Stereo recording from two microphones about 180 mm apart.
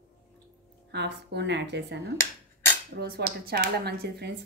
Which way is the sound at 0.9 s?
70° right (ahead or behind).